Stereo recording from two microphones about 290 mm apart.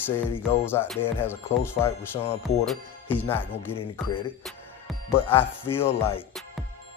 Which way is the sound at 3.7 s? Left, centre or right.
Centre.